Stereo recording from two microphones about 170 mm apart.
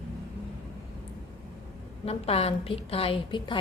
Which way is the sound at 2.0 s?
35° left (ahead or behind).